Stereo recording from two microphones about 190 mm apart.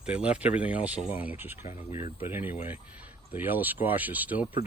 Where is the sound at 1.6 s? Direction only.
35° left (ahead or behind).